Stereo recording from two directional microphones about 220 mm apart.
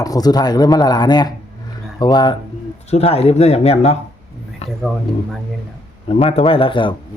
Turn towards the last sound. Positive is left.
turn(degrees=20)  # may be behind; listen again after turning